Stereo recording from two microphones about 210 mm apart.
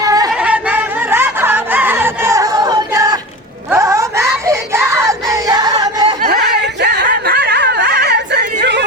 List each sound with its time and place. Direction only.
0.0 s chatter: 15° right (ahead or behind)
0.3 s a sound: 5° right (ahead or behind)
6.2 s snicker: 50° right (ahead or behind)